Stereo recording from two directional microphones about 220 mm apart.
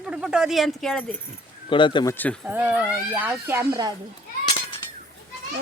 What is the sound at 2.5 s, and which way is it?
A woman's voice, 10° right (ahead or behind).